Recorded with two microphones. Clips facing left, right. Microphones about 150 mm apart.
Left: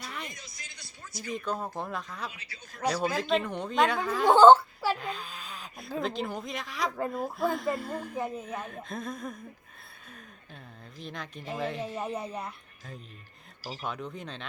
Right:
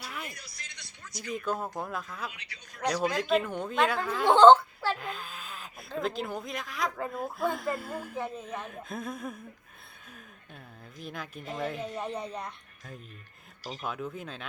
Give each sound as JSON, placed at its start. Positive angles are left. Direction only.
{"t": 0.0, "sound": "vehicle", "side_deg": -5}
{"t": 1.3, "sound": "speech", "side_deg": 0}
{"t": 2.3, "sound": "speech", "side_deg": 30}
{"t": 3.1, "sound": "speech", "side_deg": 0}
{"t": 4.9, "sound": "speech", "side_deg": 0}
{"t": 8.2, "sound": "speech", "side_deg": 10}
{"t": 8.6, "sound": "speech", "side_deg": -5}
{"t": 10.9, "sound": "speech", "side_deg": -5}